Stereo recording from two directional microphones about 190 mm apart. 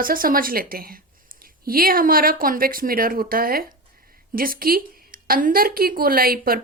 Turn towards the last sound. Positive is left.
turn(degrees=-50)  # may be behind; listen again after turning